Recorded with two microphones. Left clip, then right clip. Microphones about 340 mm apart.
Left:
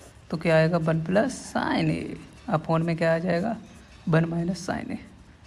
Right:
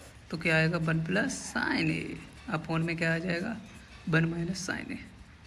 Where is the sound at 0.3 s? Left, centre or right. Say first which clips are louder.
Left 6 dB; left.